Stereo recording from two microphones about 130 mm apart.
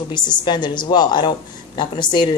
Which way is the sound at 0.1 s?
35° left (ahead or behind).